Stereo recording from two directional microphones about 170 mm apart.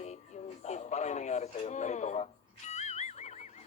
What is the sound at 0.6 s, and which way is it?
Radio, 40° left (ahead or behind).